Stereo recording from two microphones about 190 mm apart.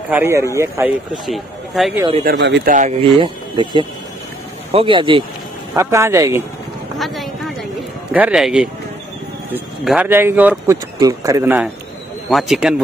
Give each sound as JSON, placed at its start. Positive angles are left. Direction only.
{"t": 0.1, "sound": "speech", "side_deg": -15}
{"t": 1.2, "sound": "speech", "side_deg": 0}
{"t": 2.2, "sound": "speech", "side_deg": -65}
{"t": 3.2, "sound": "speech", "side_deg": -25}
{"t": 5.8, "sound": "speech", "side_deg": -15}
{"t": 7.0, "sound": "a sound", "side_deg": 0}
{"t": 8.1, "sound": "speech", "side_deg": -5}